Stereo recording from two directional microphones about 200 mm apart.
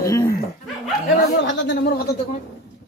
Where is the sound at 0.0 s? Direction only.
15° left (ahead or behind).